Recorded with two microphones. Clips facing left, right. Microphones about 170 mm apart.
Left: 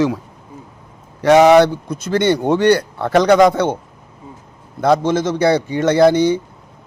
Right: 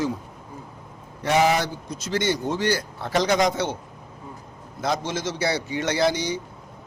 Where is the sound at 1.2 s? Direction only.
85° left; by 3.7 s 55° left (ahead or behind).